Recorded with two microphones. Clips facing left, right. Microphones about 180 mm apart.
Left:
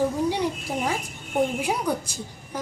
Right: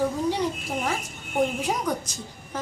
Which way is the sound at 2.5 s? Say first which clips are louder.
Left 1 dB; 10° left (ahead or behind).